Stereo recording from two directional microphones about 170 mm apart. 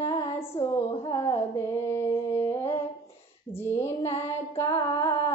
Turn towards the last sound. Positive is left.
turn(degrees=20)  # may be behind; listen again after turning